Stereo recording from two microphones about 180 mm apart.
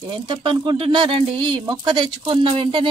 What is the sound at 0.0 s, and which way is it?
Speech, 25° right (ahead or behind).